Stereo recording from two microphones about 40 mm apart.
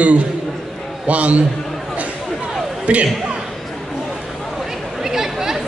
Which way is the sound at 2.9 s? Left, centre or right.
Right.